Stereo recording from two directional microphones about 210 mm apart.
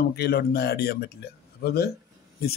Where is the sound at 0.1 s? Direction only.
50° left (ahead or behind).